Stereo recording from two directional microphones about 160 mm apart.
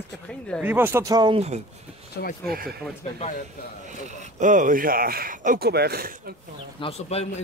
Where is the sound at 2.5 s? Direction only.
70° right (ahead or behind).